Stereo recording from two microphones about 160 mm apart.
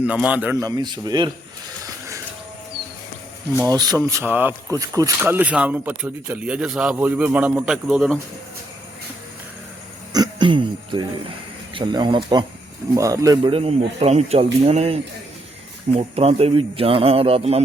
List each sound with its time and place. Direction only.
0.0 s speech: 10° right (ahead or behind)
0.6 s speech: 25° right (ahead or behind)
1.8 s a sound: 20° right (ahead or behind)
3.7 s speech: 25° right (ahead or behind); by 8.2 s 5° right (ahead or behind)
10.1 s throat clearing: 25° right (ahead or behind)
11.7 s speech: 30° right (ahead or behind)